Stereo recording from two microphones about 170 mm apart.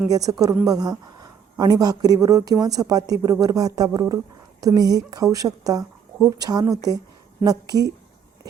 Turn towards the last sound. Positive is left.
turn(degrees=-20)  # may be behind; listen again after turning